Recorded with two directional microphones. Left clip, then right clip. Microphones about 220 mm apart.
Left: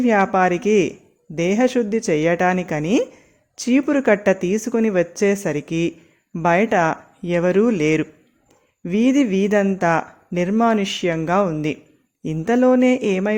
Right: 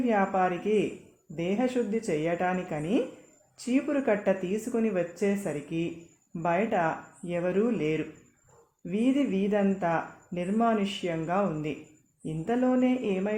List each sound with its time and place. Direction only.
0.0 s speech: 45° left (ahead or behind)